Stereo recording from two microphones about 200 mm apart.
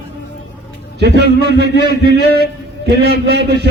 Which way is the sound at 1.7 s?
55° left (ahead or behind).